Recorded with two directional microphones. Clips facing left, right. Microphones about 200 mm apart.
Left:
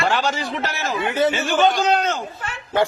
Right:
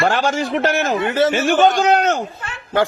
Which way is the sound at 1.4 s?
55° right (ahead or behind).